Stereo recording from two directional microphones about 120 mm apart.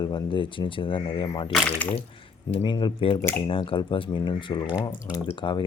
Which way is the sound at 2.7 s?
45° left (ahead or behind).